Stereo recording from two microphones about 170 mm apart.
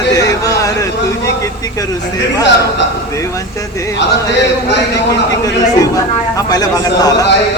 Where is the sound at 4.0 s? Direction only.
90° left.